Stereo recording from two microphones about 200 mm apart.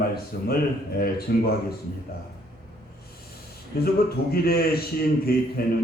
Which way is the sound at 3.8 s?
50° left (ahead or behind).